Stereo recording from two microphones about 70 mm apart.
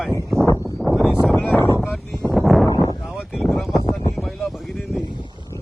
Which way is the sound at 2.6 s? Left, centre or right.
Left.